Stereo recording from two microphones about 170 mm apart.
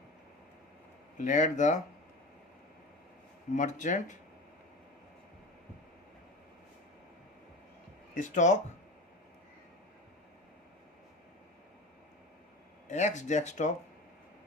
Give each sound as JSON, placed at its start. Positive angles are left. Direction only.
{"t": 1.2, "sound": "speech", "side_deg": 45}
{"t": 3.5, "sound": "speech", "side_deg": 45}
{"t": 8.1, "sound": "speech", "side_deg": 50}
{"t": 12.9, "sound": "speech", "side_deg": 45}